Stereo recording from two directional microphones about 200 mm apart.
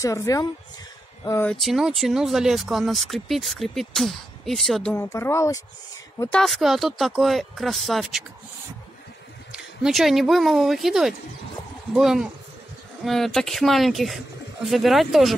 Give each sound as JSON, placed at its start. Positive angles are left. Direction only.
{"t": 0.0, "sound": "speech", "side_deg": 15}
{"t": 4.9, "sound": "speech", "side_deg": 15}
{"t": 6.4, "sound": "speech", "side_deg": 0}
{"t": 9.5, "sound": "speech", "side_deg": 0}